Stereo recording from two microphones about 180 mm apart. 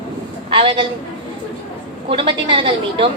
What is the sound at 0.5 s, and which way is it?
Speech, 30° right (ahead or behind).